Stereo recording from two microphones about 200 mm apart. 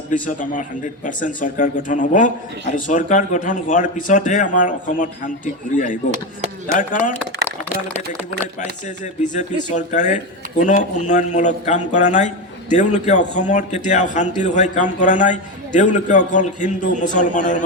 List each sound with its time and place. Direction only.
0.1 s a man's voice: 40° left (ahead or behind)
9.2 s a man's voice: 35° left (ahead or behind)